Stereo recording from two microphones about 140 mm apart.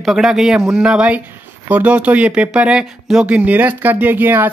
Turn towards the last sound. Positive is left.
turn(degrees=-15)  # may be behind; listen again after turning